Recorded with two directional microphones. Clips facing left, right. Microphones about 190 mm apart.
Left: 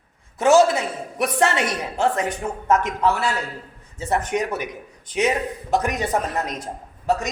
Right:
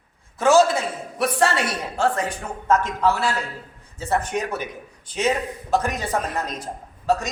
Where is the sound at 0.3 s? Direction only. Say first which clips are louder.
Left 1 dB; 20° left (ahead or behind).